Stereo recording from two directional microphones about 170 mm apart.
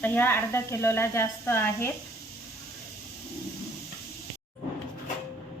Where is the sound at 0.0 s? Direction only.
10° left (ahead or behind).